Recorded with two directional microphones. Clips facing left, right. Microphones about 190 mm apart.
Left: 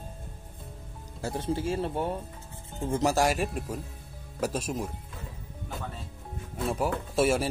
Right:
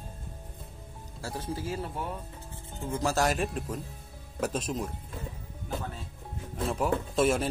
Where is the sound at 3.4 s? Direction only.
Centre (ahead or behind).